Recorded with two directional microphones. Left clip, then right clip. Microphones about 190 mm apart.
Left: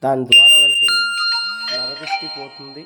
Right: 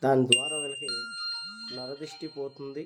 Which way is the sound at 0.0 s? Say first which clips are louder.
Left 5 dB; 10° left (ahead or behind).